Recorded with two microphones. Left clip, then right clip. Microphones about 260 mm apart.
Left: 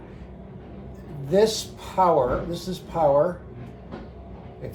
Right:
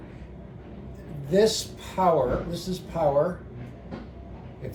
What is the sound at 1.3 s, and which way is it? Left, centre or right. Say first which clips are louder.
A man's voice: left 1 dB; centre.